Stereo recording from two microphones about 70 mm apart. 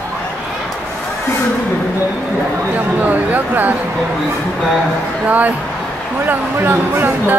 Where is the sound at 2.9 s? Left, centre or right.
Right.